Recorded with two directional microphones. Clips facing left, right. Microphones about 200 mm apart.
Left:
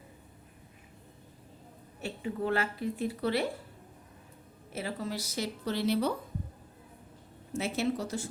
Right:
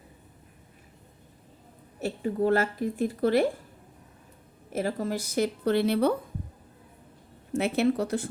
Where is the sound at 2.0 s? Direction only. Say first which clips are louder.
Right 7 dB; 40° right (ahead or behind).